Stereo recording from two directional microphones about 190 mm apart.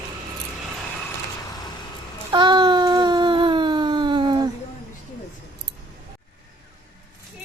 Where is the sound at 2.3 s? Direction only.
25° right (ahead or behind).